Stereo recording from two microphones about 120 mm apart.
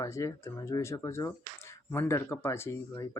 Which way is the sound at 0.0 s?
25° left (ahead or behind).